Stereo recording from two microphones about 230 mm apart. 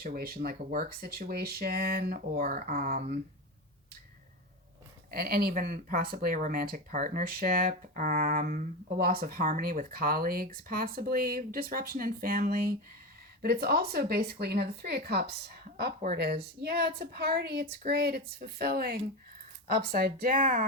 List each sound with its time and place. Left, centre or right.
0.0 s speech: right
5.1 s a woman's voice: right